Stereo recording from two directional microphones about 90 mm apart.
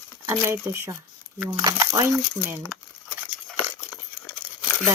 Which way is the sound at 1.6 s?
45° right (ahead or behind).